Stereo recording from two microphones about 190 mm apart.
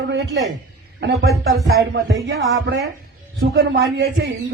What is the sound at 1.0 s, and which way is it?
Speech, 55° right (ahead or behind).